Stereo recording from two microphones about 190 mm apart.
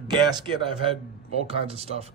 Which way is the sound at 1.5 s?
30° right (ahead or behind).